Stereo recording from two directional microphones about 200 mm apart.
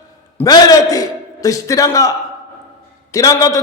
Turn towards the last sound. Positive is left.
turn(degrees=15)  # may be behind; listen again after turning